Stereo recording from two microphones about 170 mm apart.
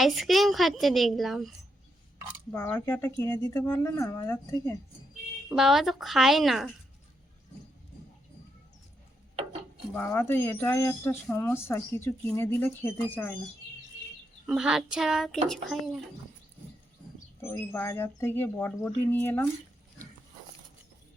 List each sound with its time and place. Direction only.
0.0 s speech: centre (ahead or behind)
2.5 s speech: 15° left (ahead or behind)
5.5 s speech: centre (ahead or behind)
9.9 s speech: 15° left (ahead or behind)
14.4 s speech: 5° right (ahead or behind)
17.4 s speech: 10° left (ahead or behind)